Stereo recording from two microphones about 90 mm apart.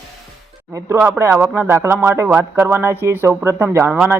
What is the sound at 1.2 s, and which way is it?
Speech, 30° right (ahead or behind).